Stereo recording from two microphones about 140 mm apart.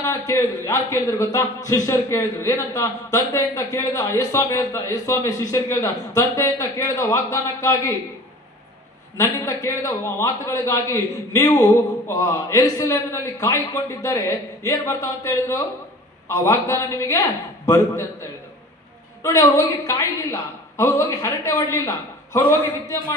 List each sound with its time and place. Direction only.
0.0 s a man's voice: 25° left (ahead or behind)
9.4 s a man's voice: 25° left (ahead or behind)